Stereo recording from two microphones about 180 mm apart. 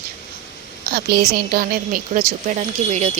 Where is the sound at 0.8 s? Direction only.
60° right (ahead or behind).